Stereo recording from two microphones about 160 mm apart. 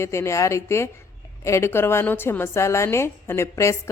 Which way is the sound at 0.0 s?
15° left (ahead or behind).